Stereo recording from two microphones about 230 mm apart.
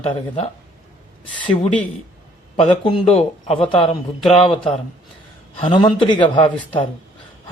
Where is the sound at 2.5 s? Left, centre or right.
Left.